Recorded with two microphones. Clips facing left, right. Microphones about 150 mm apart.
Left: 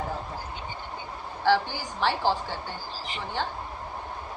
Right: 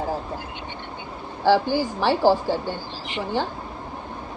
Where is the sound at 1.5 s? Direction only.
15° right (ahead or behind).